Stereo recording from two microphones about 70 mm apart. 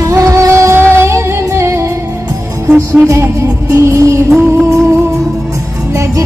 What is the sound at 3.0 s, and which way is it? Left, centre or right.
Music, right.